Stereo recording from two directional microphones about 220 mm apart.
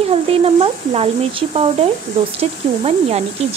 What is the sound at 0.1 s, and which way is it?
A woman's voice, 25° right (ahead or behind).